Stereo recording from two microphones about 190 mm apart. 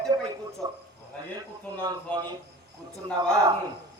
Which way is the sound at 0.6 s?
20° right (ahead or behind).